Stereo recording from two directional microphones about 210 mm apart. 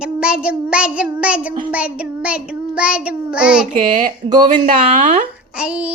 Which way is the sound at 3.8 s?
40° right (ahead or behind).